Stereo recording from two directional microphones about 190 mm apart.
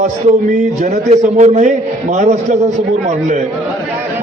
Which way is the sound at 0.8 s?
35° right (ahead or behind).